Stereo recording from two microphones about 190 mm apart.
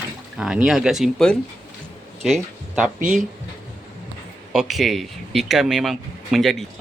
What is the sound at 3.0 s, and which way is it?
Speech, 45° right (ahead or behind).